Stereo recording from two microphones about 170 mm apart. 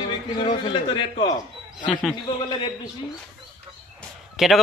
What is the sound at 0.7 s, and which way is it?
A man's voice, 30° left (ahead or behind).